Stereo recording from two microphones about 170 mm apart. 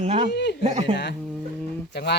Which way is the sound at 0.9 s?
90° left.